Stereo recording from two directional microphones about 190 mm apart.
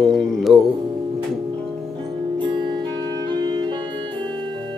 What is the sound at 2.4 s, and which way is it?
Music, 25° right (ahead or behind).